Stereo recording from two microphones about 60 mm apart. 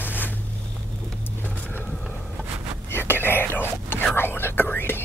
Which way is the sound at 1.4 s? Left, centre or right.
Left.